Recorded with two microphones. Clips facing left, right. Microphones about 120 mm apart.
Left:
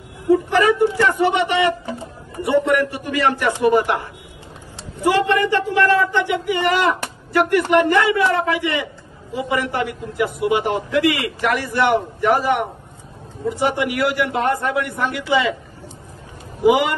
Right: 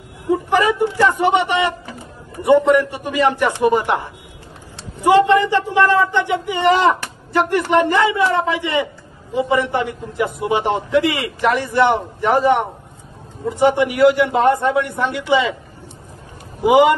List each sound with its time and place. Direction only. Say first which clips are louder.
0.3 s a sound: left 1 dB; 15° right (ahead or behind)
2.4 s a man's voice: right 4 dB; 20° right (ahead or behind)
16.6 s a man's voice: right 3 dB; 25° right (ahead or behind)